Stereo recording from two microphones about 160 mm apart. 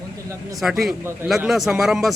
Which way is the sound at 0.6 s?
Centre (ahead or behind).